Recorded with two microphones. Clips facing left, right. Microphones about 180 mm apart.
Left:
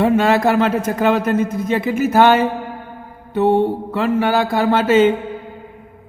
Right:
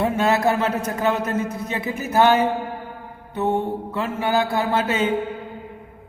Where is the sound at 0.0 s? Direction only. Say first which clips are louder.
Left 5 dB; 90° left.